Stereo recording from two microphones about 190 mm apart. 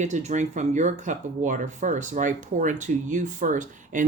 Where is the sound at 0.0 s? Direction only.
35° right (ahead or behind).